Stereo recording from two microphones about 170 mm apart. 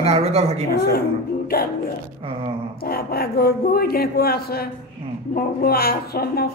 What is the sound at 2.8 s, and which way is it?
A woman's voice, 60° left (ahead or behind).